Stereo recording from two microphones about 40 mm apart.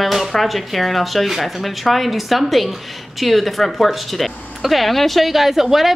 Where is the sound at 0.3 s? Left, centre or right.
Centre.